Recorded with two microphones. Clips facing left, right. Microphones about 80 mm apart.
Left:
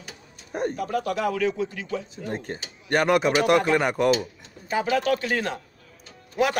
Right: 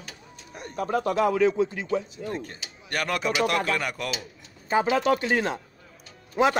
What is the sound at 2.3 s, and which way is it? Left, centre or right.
Speech, left.